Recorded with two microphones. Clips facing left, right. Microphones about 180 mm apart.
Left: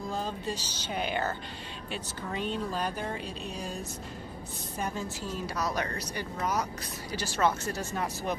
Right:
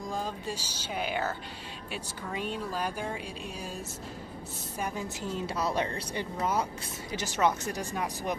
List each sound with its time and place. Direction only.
0.0 s speech: 10° right (ahead or behind)
4.7 s a woman's voice: 10° right (ahead or behind)